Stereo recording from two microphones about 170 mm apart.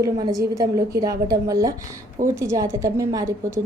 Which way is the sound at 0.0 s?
20° right (ahead or behind).